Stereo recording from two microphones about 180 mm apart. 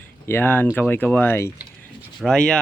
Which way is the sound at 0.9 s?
10° left (ahead or behind).